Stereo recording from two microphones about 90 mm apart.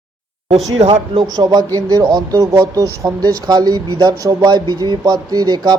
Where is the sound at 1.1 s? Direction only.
45° right (ahead or behind).